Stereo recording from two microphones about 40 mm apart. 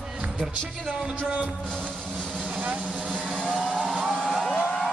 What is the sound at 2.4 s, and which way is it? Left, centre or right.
Speech, right.